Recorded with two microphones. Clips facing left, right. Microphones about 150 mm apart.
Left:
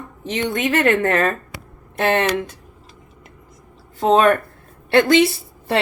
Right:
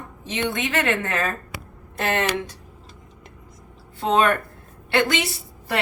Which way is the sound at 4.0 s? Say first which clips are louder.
Left 5 dB; 40° left (ahead or behind).